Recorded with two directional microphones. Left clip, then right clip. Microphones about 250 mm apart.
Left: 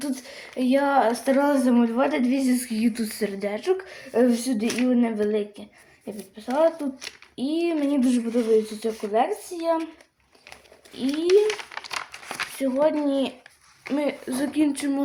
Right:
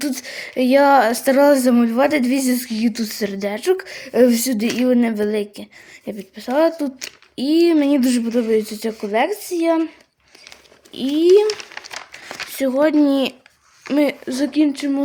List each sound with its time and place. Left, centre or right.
0.0 s speech: right
11.1 s speech: right
12.5 s speech: right
14.3 s speech: right